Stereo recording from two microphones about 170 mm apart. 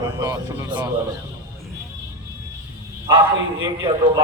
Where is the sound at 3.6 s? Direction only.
25° right (ahead or behind).